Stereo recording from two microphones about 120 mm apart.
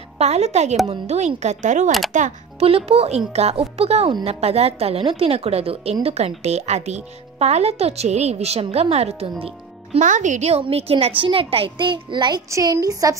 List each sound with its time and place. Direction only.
0.2 s speech: 65° right (ahead or behind); by 2.3 s 90° right
2.6 s speech: 55° right (ahead or behind)
9.9 s speech: 90° right
10.6 s a child's voice: 55° right (ahead or behind); by 12.4 s 40° right (ahead or behind)
12.4 s speech: 25° right (ahead or behind)